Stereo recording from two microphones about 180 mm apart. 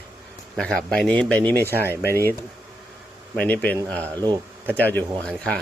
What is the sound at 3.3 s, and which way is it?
Speech, 10° left (ahead or behind).